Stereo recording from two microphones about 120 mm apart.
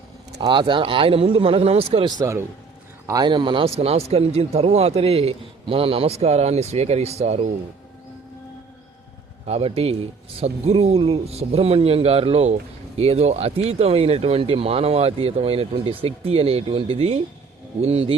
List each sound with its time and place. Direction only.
0.4 s speech: 40° right (ahead or behind)
2.0 s a man's voice: 30° right (ahead or behind); by 7.4 s 65° right (ahead or behind)
9.5 s a man's voice: 55° right (ahead or behind)